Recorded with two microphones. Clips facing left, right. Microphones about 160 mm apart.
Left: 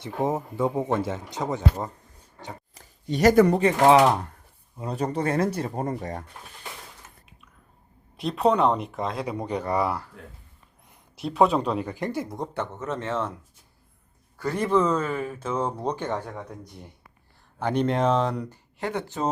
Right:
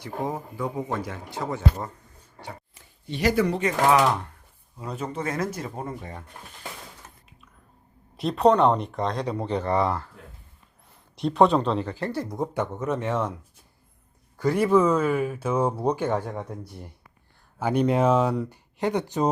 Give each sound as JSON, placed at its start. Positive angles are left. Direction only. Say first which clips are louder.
{"t": 0.0, "sound": "speech", "louder": "left 4 dB", "side_deg": 25}
{"t": 2.7, "sound": "speech", "louder": "left 7 dB", "side_deg": 45}
{"t": 3.6, "sound": "speech", "louder": "left 3 dB", "side_deg": 30}
{"t": 8.1, "sound": "speech", "louder": "right 3 dB", "side_deg": 0}
{"t": 11.2, "sound": "speech", "louder": "right 2 dB", "side_deg": 5}
{"t": 12.5, "sound": "speech", "louder": "right 3 dB", "side_deg": -10}
{"t": 14.3, "sound": "speech", "louder": "right 3 dB", "side_deg": -15}
{"t": 17.6, "sound": "speech", "louder": "right 2 dB", "side_deg": -5}